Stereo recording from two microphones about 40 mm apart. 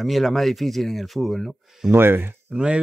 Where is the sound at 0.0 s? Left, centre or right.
Centre.